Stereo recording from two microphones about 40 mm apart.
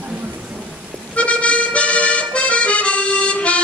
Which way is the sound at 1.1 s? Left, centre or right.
Left.